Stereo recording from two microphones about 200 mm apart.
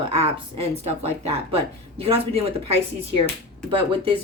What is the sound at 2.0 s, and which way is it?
Speech, 30° right (ahead or behind).